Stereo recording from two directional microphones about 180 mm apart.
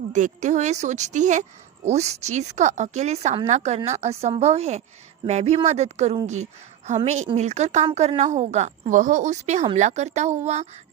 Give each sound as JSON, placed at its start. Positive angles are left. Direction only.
{"t": 0.1, "sound": "speech", "side_deg": -40}